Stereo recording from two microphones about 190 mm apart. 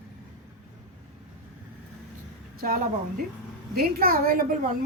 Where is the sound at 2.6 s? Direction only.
50° right (ahead or behind).